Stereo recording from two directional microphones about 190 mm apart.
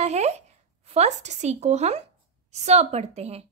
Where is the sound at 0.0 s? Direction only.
35° right (ahead or behind).